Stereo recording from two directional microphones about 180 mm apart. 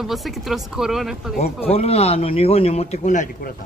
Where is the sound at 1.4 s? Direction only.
35° left (ahead or behind).